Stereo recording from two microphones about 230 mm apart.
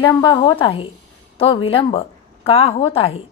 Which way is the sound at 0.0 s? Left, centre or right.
Centre.